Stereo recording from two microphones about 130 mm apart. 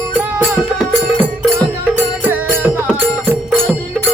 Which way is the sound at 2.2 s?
15° right (ahead or behind).